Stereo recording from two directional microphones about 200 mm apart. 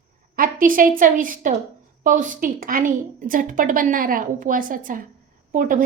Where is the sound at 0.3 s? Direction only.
45° right (ahead or behind).